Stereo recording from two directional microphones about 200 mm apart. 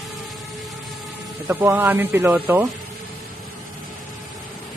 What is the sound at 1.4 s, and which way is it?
Speech, 10° right (ahead or behind).